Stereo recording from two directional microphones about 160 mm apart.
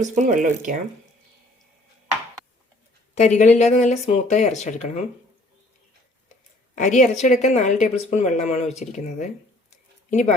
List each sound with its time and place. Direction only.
0.0 s speech: 50° right (ahead or behind)
3.2 s a woman's voice: 50° left (ahead or behind)
6.7 s a woman's voice: 50° left (ahead or behind)